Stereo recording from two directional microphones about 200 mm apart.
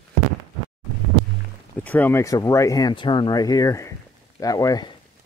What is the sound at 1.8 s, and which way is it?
Speech, 10° left (ahead or behind).